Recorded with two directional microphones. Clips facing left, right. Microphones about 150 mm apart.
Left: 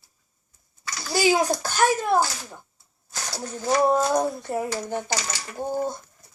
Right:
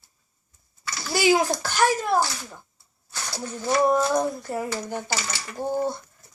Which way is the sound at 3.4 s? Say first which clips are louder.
Left 1 dB; 40° left (ahead or behind).